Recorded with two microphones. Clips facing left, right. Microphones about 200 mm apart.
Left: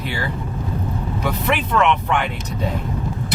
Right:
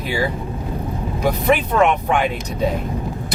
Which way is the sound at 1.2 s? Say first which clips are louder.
Right 5 dB; 40° right (ahead or behind).